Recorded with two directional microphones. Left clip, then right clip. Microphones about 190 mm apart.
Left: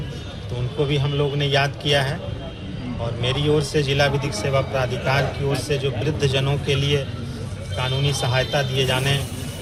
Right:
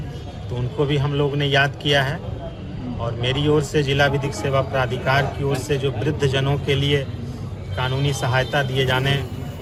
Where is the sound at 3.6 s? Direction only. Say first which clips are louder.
Right 1 dB; 35° right (ahead or behind).